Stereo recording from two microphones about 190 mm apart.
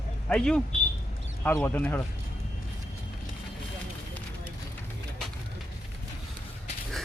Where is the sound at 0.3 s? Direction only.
5° left (ahead or behind).